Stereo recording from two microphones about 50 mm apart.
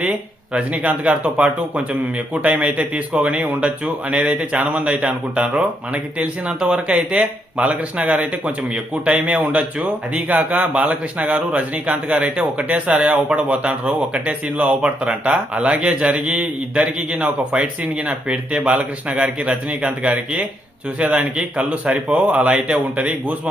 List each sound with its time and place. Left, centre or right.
0.0 s speech: right